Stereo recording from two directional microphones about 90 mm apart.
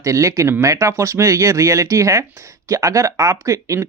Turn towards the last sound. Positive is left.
turn(degrees=-35)  # may be behind; listen again after turning